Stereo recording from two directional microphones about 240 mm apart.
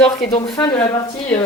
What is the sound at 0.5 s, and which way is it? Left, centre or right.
Speech, centre.